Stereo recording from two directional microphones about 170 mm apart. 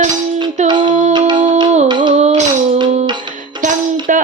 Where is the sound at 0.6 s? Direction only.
45° right (ahead or behind).